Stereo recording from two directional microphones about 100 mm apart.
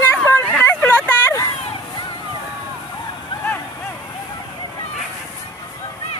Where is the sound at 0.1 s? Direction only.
25° left (ahead or behind).